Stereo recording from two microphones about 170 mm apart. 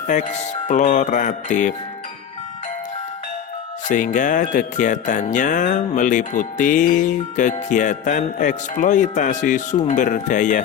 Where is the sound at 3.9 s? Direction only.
50° left (ahead or behind).